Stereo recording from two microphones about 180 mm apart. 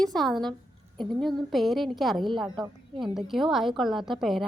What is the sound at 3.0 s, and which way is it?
A woman's voice, centre (ahead or behind).